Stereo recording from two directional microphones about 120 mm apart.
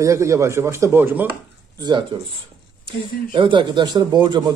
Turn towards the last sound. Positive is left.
turn(degrees=-40)  # may be behind; listen again after turning